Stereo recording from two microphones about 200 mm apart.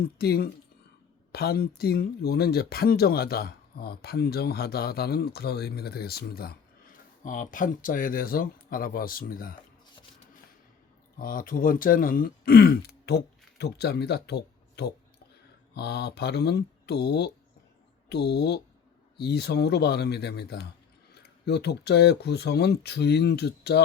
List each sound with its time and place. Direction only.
0.0 s speech: 50° left (ahead or behind)
11.2 s speech: 45° left (ahead or behind)